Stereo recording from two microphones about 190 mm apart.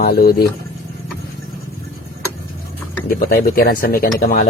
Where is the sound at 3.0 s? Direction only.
45° left (ahead or behind).